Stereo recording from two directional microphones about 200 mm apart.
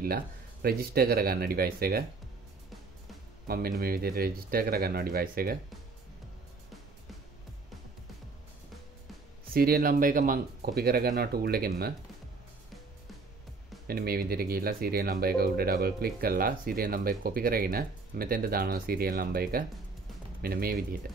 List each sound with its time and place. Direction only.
0.0 s speech: 50° right (ahead or behind)
3.4 s speech: 50° right (ahead or behind)
9.5 s speech: 50° right (ahead or behind)
13.8 s speech: 50° right (ahead or behind)